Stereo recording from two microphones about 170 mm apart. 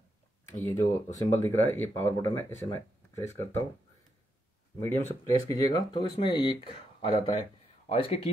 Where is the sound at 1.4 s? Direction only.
15° left (ahead or behind).